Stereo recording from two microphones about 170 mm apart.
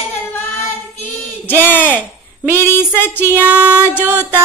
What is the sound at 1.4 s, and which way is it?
Speech, 10° left (ahead or behind).